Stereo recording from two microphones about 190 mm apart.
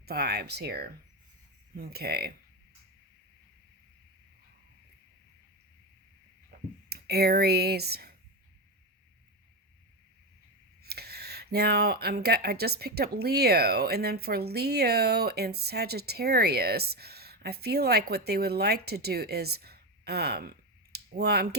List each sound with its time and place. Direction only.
0.0 s speech: 55° right (ahead or behind)
6.5 s speech: 55° right (ahead or behind)
10.8 s speech: 55° right (ahead or behind)
20.9 s a sound: 55° right (ahead or behind)